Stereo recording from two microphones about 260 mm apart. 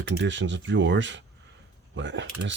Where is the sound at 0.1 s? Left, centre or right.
Right.